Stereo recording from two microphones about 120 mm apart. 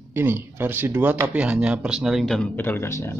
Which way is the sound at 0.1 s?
20° right (ahead or behind).